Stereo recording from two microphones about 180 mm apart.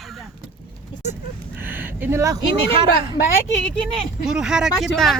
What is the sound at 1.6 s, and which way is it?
Speech, 10° right (ahead or behind).